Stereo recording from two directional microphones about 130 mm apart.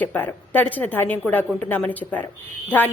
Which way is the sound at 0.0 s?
15° left (ahead or behind).